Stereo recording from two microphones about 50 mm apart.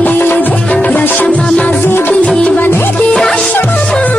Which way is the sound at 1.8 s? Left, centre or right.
Left.